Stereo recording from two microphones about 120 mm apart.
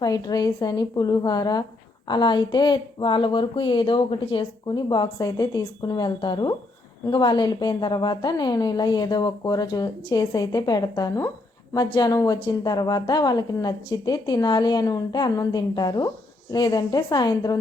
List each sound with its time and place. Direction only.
0.0 s speech: 30° left (ahead or behind)